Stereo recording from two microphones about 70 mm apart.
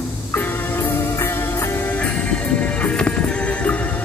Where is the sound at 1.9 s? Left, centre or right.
Centre.